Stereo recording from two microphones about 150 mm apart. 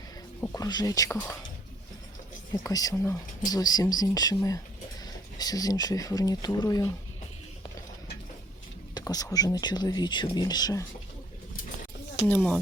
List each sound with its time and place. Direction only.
0.4 s speech: 25° left (ahead or behind)
2.5 s speech: 25° left (ahead or behind)
9.0 s speech: 25° left (ahead or behind)
12.2 s speech: 10° left (ahead or behind)